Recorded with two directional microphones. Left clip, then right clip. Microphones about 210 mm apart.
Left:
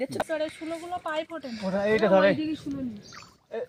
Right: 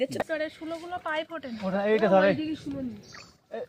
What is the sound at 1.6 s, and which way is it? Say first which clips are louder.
Speech: left 1 dB; 25° left (ahead or behind).